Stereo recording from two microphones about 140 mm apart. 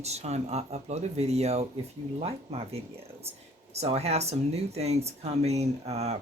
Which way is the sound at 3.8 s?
50° right (ahead or behind).